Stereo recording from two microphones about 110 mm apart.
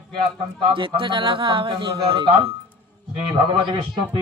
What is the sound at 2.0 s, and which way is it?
Speech, 60° right (ahead or behind).